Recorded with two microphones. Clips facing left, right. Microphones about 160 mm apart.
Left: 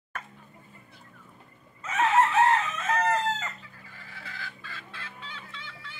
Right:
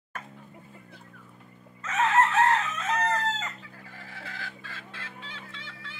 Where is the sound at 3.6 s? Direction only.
65° right (ahead or behind).